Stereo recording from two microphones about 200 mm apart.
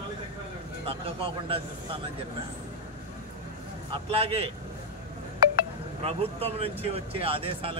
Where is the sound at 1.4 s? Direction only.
25° right (ahead or behind).